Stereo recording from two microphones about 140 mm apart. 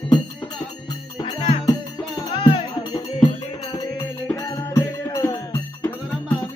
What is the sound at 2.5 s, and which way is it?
Music, 35° left (ahead or behind).